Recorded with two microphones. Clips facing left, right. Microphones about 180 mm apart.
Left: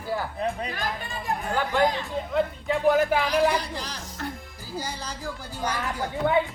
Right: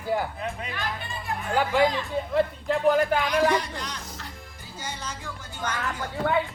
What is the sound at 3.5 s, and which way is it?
Speech, 35° left (ahead or behind).